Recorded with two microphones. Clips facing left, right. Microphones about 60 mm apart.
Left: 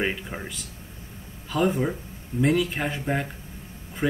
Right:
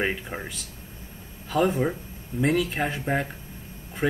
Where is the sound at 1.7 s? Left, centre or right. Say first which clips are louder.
Even; centre.